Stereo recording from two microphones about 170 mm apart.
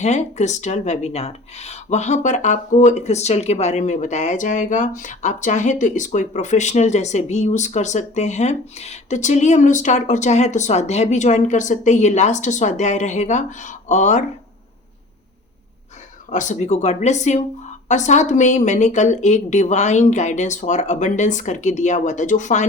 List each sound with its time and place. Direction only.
0.0 s speech: 40° left (ahead or behind)
16.3 s speech: 45° left (ahead or behind)